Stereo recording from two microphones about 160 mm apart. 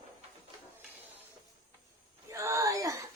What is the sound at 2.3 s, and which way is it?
Whimper, 20° right (ahead or behind).